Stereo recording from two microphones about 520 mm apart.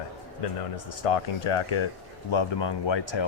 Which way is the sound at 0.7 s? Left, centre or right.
Left.